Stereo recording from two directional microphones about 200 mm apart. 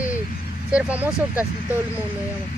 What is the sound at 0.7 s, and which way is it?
Speech, 5° right (ahead or behind).